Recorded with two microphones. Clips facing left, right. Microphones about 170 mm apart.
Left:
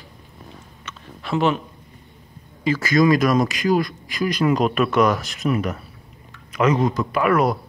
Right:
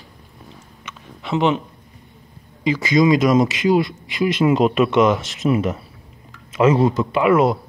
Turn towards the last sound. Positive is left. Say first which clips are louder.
# right 3 dB
turn(degrees=-25)  # may be behind; listen again after turning